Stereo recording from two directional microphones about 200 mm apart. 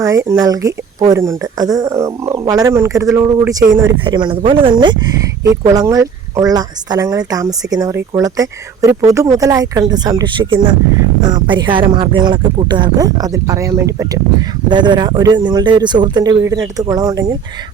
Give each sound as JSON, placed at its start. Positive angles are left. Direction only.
{"t": 0.0, "sound": "speech", "side_deg": -15}